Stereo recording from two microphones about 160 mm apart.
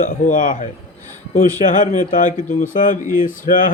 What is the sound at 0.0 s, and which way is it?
Speech, 55° left (ahead or behind).